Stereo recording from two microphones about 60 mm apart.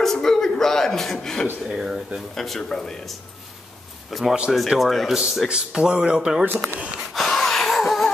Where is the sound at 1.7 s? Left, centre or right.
Centre.